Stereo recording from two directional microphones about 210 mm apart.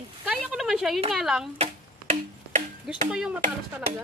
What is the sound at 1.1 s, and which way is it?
Speech, centre (ahead or behind).